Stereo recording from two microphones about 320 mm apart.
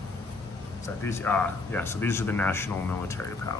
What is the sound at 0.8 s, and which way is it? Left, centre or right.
Speech, centre.